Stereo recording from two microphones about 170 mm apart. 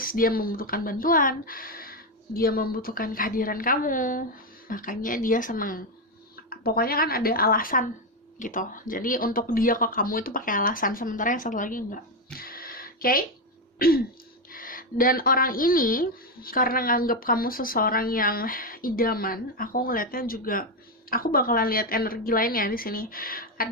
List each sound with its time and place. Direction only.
0.0 s speech: 55° left (ahead or behind)
12.4 s a sound: 60° left (ahead or behind)
13.7 s throat clearing: 60° left (ahead or behind)
14.5 s speech: 55° left (ahead or behind)